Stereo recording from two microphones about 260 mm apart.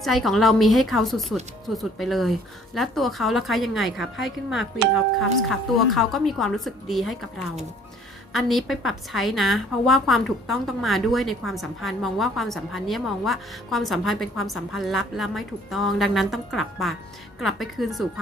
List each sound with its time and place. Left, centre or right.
0.0 s a woman's voice: centre
5.5 s a woman's voice: centre
8.3 s a woman's voice: centre